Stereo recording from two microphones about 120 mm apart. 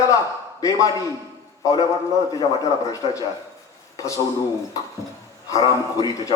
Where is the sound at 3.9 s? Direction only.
25° left (ahead or behind).